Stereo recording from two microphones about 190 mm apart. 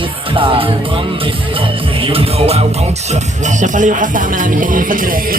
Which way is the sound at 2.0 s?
30° right (ahead or behind).